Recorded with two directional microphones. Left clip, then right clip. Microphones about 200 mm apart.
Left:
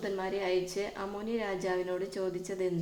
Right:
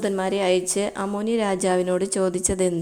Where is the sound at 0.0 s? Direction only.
40° right (ahead or behind).